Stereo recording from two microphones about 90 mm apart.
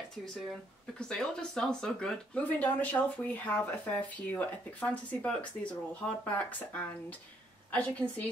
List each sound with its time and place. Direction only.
0.2 s speech: 5° left (ahead or behind)